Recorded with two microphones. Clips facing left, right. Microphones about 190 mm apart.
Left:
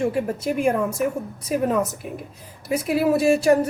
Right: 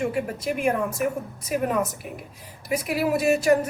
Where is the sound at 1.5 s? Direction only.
35° left (ahead or behind).